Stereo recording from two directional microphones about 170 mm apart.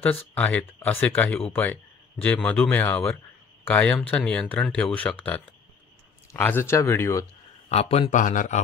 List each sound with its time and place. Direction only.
0.0 s speech: 10° left (ahead or behind)
7.7 s speech: 35° left (ahead or behind)